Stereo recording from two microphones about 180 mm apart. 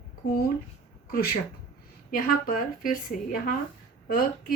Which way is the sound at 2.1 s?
50° left (ahead or behind).